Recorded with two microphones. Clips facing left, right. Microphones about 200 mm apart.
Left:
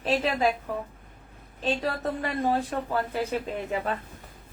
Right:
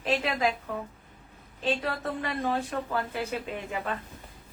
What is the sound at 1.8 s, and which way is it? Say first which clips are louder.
Speech: left 3 dB; 35° left (ahead or behind).